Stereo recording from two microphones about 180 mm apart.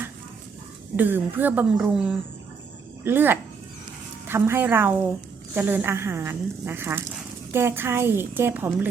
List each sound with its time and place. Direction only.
0.9 s speech: 10° right (ahead or behind)